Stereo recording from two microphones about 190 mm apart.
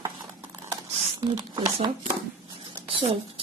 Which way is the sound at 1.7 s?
30° right (ahead or behind).